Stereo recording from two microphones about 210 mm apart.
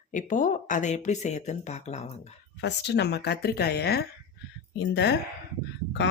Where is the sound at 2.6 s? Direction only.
55° left (ahead or behind).